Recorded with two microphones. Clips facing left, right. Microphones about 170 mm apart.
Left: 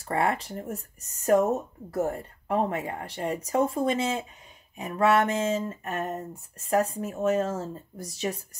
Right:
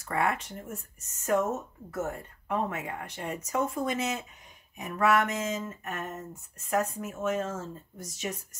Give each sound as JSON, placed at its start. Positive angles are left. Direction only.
{"t": 0.0, "sound": "speech", "side_deg": 30}